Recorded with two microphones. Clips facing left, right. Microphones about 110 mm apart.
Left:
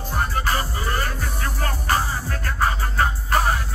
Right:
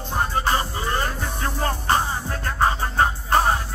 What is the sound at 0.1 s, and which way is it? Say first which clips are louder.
Music: right 2 dB; 25° right (ahead or behind).